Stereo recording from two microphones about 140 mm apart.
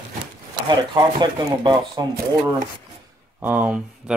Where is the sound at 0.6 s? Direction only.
30° right (ahead or behind).